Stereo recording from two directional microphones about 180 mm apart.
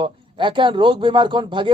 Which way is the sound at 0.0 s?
25° right (ahead or behind).